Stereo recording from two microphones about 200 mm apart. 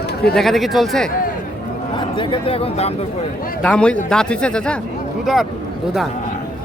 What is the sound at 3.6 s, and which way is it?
Speech, 5° left (ahead or behind).